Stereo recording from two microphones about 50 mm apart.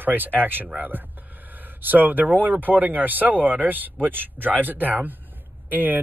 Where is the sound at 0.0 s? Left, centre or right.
Right.